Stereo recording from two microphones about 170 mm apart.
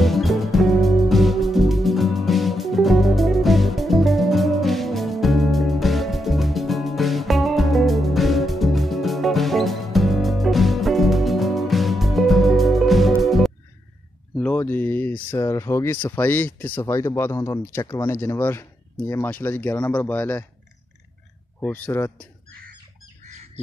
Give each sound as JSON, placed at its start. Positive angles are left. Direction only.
{"t": 0.0, "sound": "music", "side_deg": 0}
{"t": 14.3, "sound": "speech", "side_deg": 10}
{"t": 21.5, "sound": "speech", "side_deg": 10}